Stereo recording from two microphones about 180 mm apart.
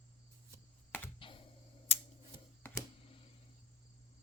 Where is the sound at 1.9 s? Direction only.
35° left (ahead or behind).